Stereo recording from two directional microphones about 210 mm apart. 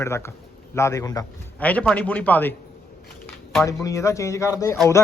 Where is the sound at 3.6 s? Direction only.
15° left (ahead or behind).